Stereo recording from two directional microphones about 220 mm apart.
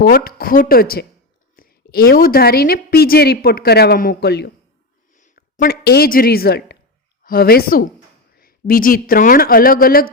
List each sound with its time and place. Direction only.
0.0 s a woman's voice: 45° left (ahead or behind)
5.1 s a woman's voice: 35° left (ahead or behind)